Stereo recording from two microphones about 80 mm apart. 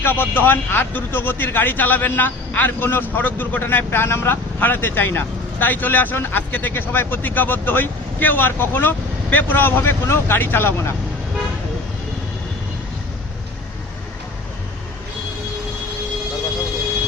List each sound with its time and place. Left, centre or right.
0.0 s speech: left